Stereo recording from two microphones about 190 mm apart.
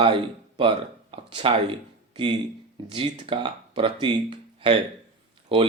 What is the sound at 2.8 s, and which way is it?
Speech, 25° right (ahead or behind).